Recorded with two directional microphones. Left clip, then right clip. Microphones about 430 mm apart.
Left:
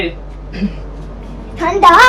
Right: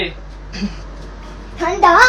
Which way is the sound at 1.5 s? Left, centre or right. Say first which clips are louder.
Left 3 dB; centre.